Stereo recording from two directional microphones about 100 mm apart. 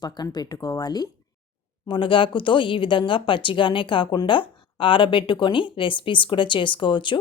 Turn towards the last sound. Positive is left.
turn(degrees=55)  # may be behind; listen again after turning